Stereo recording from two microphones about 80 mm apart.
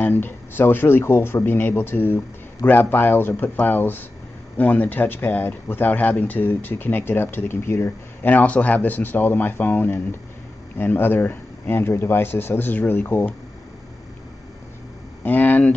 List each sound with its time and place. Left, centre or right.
0.0 s speech: left
8.3 s speech: centre
15.2 s speech: left